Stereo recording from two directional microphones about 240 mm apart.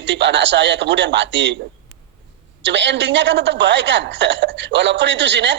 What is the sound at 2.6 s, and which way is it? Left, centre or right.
A woman's voice, right.